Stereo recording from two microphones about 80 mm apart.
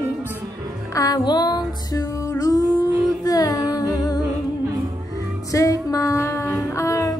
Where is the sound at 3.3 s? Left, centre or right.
Left.